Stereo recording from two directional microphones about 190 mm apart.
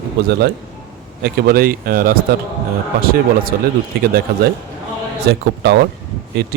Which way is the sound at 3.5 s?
50° right (ahead or behind).